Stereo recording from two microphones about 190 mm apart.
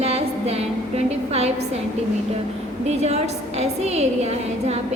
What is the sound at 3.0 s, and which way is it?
A woman's voice, 35° right (ahead or behind).